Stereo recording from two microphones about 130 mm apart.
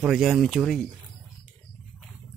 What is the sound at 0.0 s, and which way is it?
Speech, 5° right (ahead or behind).